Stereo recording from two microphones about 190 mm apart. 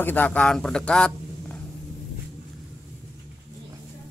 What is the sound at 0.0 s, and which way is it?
Speech, 10° left (ahead or behind).